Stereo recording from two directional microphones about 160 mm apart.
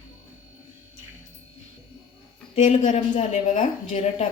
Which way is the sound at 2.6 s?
50° left (ahead or behind).